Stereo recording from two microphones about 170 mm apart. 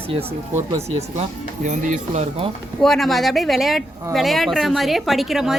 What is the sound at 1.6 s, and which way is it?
Speech, 45° right (ahead or behind).